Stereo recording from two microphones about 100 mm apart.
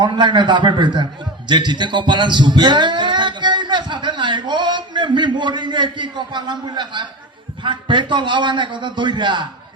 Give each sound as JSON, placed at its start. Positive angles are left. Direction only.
{"t": 0.0, "sound": "speech", "side_deg": -50}